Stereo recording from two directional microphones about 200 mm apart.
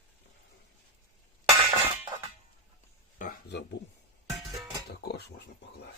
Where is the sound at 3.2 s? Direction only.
45° left (ahead or behind).